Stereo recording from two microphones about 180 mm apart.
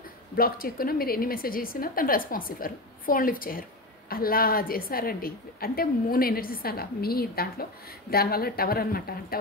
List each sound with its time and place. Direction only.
0.4 s a woman's voice: 55° left (ahead or behind)